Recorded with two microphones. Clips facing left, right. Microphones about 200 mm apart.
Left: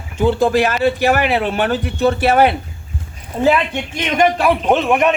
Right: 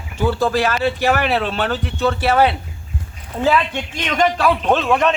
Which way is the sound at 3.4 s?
10° left (ahead or behind).